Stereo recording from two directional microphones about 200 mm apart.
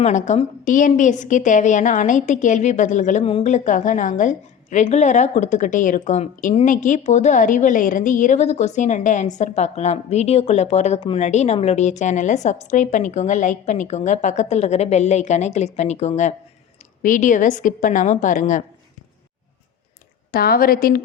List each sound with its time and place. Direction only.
0.0 s a woman's voice: 35° left (ahead or behind)
20.3 s a woman's voice: 50° left (ahead or behind)